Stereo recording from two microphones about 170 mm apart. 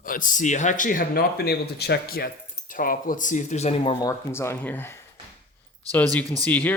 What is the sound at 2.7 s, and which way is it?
Speech, 55° left (ahead or behind).